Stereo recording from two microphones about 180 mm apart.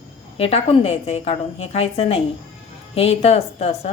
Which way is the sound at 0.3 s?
35° left (ahead or behind).